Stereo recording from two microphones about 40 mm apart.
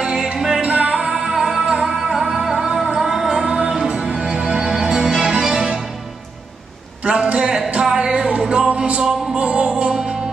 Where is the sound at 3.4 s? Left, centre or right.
Right.